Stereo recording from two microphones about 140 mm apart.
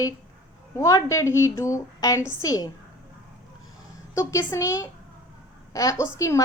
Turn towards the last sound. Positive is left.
turn(degrees=20)  # may be behind; listen again after turning